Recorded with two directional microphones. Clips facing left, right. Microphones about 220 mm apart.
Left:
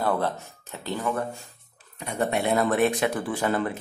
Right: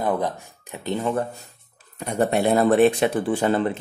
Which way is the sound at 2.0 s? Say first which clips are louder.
Right 5 dB; 40° right (ahead or behind).